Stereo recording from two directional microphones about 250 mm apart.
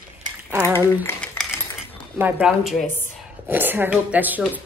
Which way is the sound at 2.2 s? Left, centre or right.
Centre.